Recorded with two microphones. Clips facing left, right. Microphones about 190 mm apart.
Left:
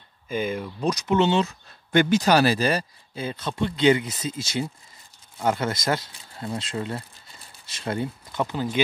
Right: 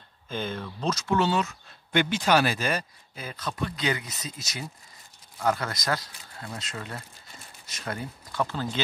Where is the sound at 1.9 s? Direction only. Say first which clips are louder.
Left 5 dB; 45° left (ahead or behind).